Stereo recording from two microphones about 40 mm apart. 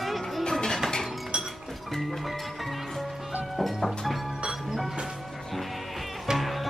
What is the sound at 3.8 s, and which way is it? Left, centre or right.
Music, centre.